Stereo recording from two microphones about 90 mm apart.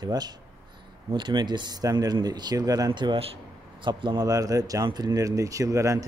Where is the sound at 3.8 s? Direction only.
60° right (ahead or behind).